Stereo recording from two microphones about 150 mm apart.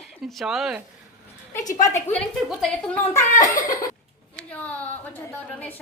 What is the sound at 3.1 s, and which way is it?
Speech, 20° left (ahead or behind).